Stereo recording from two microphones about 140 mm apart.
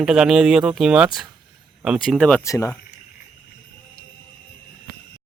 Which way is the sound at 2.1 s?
5° left (ahead or behind).